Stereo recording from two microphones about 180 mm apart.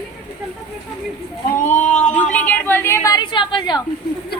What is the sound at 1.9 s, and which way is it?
Speech, 40° left (ahead or behind).